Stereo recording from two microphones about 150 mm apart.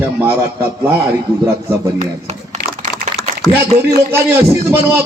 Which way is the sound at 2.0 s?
45° right (ahead or behind).